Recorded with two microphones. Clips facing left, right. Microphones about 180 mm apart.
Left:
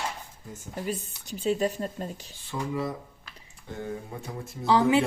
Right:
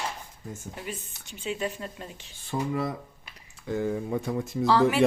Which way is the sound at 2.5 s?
60° right (ahead or behind).